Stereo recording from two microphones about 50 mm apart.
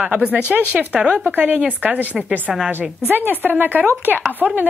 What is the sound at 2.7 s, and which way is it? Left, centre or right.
A woman's voice, right.